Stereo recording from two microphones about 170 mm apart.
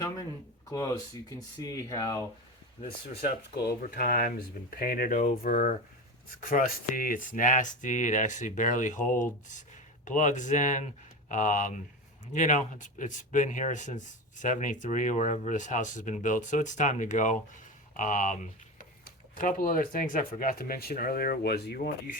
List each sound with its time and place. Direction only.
0.7 s speech: 20° left (ahead or behind)
2.8 s speech: 35° left (ahead or behind)
3.6 s speech: 65° left (ahead or behind)